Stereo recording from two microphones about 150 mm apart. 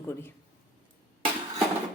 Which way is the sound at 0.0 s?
15° left (ahead or behind).